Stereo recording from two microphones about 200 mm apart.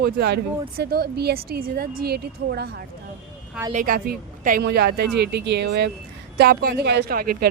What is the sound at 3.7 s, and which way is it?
A woman's voice, 45° right (ahead or behind).